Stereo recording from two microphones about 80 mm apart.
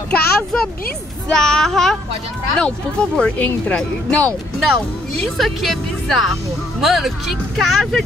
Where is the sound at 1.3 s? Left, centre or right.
Centre.